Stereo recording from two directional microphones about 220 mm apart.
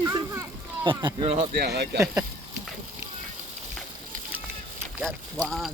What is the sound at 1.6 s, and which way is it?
Speech, 50° right (ahead or behind).